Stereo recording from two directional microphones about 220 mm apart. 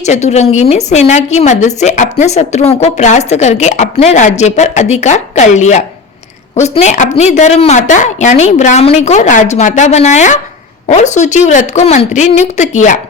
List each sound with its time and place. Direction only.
0.0 s a woman's voice: 30° left (ahead or behind)